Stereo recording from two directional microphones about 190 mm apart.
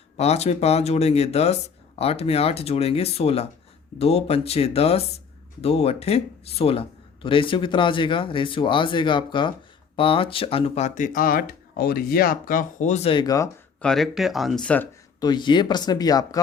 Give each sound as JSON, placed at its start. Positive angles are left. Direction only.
{"t": 0.2, "sound": "speech", "side_deg": 35}
{"t": 13.8, "sound": "speech", "side_deg": 0}
{"t": 15.2, "sound": "speech", "side_deg": 25}